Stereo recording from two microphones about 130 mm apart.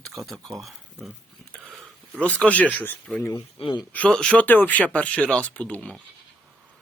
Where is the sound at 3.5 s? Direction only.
40° left (ahead or behind).